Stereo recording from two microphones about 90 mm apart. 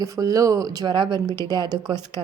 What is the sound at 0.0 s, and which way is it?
A woman's voice, 40° right (ahead or behind).